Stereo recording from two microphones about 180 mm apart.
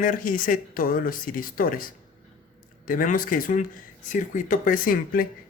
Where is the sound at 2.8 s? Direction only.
50° left (ahead or behind).